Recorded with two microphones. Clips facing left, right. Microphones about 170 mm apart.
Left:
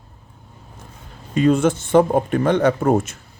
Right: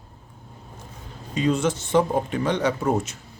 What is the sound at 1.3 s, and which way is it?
Speech, 55° left (ahead or behind).